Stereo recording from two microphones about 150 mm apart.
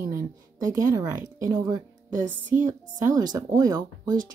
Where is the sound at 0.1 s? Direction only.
25° right (ahead or behind).